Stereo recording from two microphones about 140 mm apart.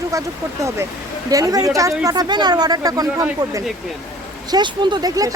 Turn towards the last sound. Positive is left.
turn(degrees=-25)  # may be behind; listen again after turning